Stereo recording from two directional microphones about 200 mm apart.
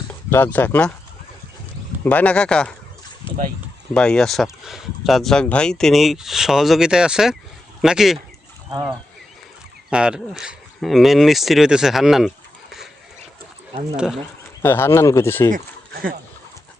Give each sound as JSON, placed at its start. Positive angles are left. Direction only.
{"t": 0.3, "sound": "speech", "side_deg": 10}
{"t": 2.0, "sound": "speech", "side_deg": 10}
{"t": 3.9, "sound": "speech", "side_deg": 5}
{"t": 9.9, "sound": "speech", "side_deg": -5}
{"t": 13.9, "sound": "speech", "side_deg": -5}
{"t": 14.6, "sound": "speech", "side_deg": 10}
{"t": 15.5, "sound": "a sound", "side_deg": -45}